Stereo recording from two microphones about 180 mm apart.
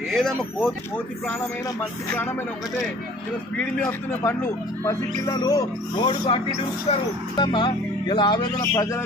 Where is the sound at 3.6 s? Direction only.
10° left (ahead or behind).